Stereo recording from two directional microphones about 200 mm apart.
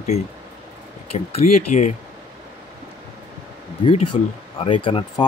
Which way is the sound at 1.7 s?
35° left (ahead or behind).